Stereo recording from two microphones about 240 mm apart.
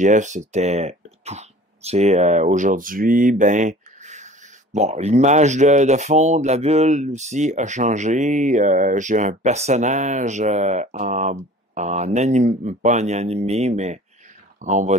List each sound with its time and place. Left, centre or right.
0.0 s speech: right